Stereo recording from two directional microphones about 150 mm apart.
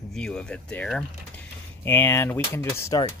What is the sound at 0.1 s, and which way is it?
Speech, 5° left (ahead or behind).